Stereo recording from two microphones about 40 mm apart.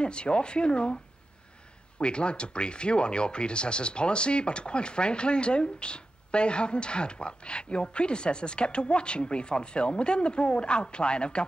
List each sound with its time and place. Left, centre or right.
0.0 s speech: left
2.0 s speech: left